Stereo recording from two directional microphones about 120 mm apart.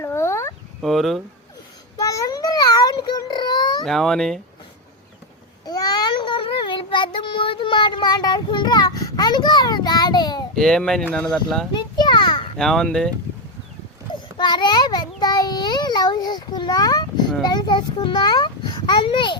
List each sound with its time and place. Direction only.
0.0 s a sound: 20° left (ahead or behind)
0.8 s speech: centre (ahead or behind)
2.0 s a sound: 30° left (ahead or behind)
3.8 s speech: centre (ahead or behind)
5.6 s child singing: 35° left (ahead or behind)
10.5 s speech: 5° left (ahead or behind)
11.7 s children playing: 40° left (ahead or behind)
12.5 s speech: 5° left (ahead or behind)
14.1 s child singing: 40° left (ahead or behind)
17.4 s a child's voice: 35° left (ahead or behind)